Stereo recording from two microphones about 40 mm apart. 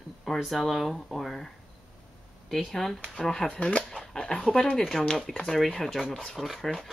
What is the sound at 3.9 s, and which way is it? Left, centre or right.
Dog, centre.